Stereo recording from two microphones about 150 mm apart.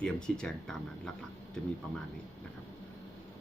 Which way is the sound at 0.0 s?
5° left (ahead or behind).